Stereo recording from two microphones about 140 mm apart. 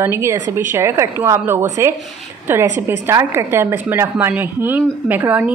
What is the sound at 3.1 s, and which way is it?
Speech, 20° right (ahead or behind).